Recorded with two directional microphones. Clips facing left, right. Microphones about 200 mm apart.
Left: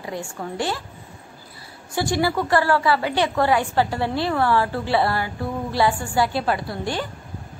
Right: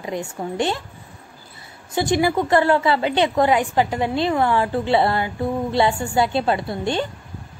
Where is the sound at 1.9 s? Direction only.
20° right (ahead or behind).